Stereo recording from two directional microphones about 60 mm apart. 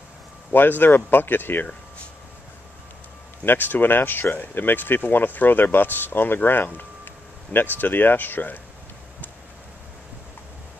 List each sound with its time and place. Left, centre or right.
0.5 s speech: left
3.4 s speech: left